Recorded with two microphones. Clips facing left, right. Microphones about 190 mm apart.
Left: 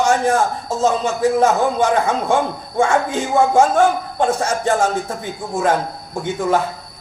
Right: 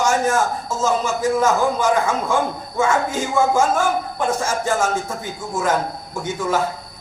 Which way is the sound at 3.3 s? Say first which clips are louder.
Left 4 dB; 65° left (ahead or behind).